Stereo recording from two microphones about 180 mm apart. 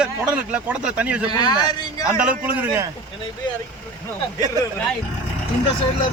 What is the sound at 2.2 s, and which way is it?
Speech, 10° right (ahead or behind).